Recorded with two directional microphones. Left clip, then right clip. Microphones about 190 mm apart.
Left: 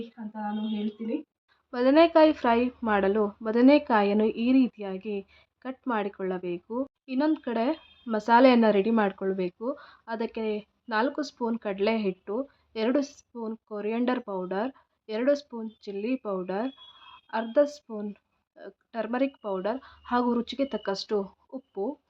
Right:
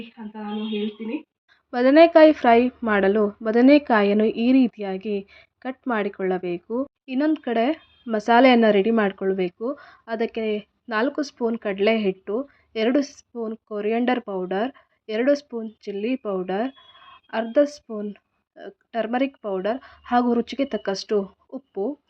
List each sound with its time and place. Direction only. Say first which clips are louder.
1.7 s a woman's voice: right 6 dB; 20° right (ahead or behind)